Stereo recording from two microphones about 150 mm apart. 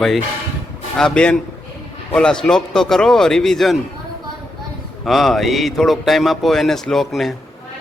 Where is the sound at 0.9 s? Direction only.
5° left (ahead or behind).